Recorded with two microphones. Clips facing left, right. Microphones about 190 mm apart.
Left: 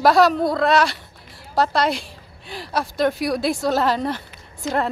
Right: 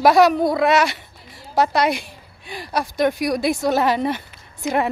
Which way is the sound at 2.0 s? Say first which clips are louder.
Even; 55° right (ahead or behind).